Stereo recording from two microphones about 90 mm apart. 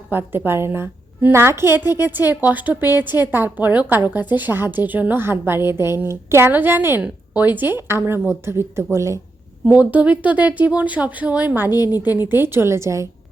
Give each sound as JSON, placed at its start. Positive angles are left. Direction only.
{"t": 0.1, "sound": "a woman's voice", "side_deg": -25}
{"t": 9.6, "sound": "a woman's voice", "side_deg": -20}